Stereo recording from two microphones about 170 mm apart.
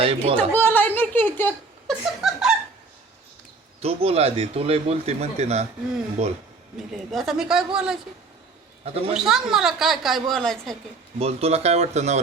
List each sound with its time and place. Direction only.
0.0 s speech: 35° right (ahead or behind)
0.3 s a sound: 10° left (ahead or behind)
1.9 s snicker: centre (ahead or behind)
3.8 s speech: 35° right (ahead or behind)
6.7 s a woman's voice: centre (ahead or behind)
8.8 s a man's voice: 35° right (ahead or behind)
9.1 s a woman's voice: centre (ahead or behind)
11.2 s speech: 35° right (ahead or behind)